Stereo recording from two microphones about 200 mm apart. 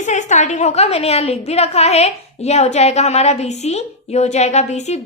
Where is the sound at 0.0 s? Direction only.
35° left (ahead or behind).